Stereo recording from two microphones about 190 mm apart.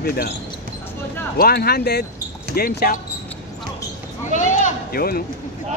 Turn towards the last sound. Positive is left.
turn(degrees=50)  # may be behind; listen again after turning